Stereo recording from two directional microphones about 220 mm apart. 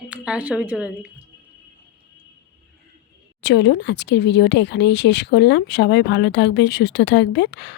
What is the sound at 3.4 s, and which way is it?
Speech, 50° left (ahead or behind).